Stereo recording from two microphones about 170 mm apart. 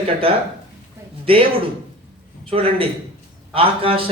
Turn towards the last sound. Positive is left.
turn(degrees=-35)  # may be behind; listen again after turning